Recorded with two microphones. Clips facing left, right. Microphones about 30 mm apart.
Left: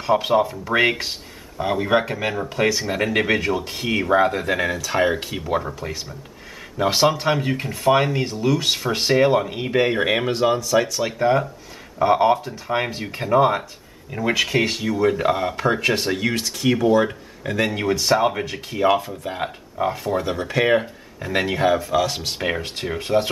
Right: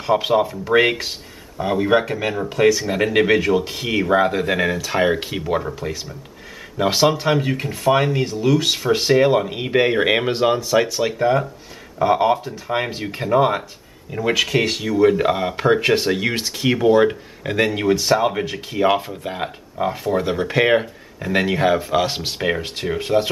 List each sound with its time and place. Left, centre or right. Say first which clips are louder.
0.3 s speech: right 2 dB; centre
3.0 s speech: right 2 dB; centre
3.5 s speech: right 3 dB; centre
9.5 s speech: right 2 dB; centre
11.1 s speech: right 1 dB; centre
15.0 s speech: right 4 dB; centre
17.6 s speech: right 2 dB; centre
19.3 s speech: left 1 dB; centre
20.8 s speech: right 3 dB; centre
21.7 s speech: right 1 dB; right
22.8 s speech: right 1 dB; centre